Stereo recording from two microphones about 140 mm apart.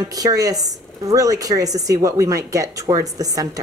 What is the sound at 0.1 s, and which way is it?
A woman's voice, 25° right (ahead or behind).